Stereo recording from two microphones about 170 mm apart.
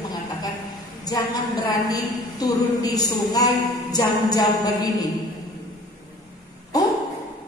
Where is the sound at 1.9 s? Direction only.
20° left (ahead or behind).